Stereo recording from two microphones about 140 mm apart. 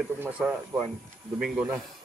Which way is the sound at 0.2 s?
10° right (ahead or behind).